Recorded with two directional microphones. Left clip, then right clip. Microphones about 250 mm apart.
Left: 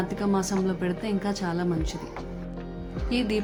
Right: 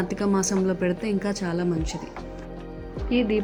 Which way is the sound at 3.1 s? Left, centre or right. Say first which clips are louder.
Right 4 dB; left.